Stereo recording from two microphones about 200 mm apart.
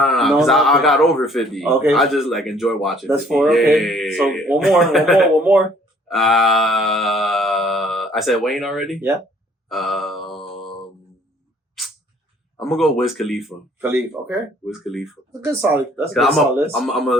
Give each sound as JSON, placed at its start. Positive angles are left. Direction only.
{"t": 0.0, "sound": "a man's voice", "side_deg": 0}
{"t": 6.1, "sound": "a sound", "side_deg": 0}
{"t": 9.6, "sound": "mantra", "side_deg": 0}
{"t": 10.3, "sound": "mantra", "side_deg": 25}
{"t": 12.5, "sound": "a man's voice", "side_deg": 0}
{"t": 14.7, "sound": "a man's voice", "side_deg": 0}
{"t": 15.3, "sound": "speech", "side_deg": -15}
{"t": 16.1, "sound": "a man's voice", "side_deg": 0}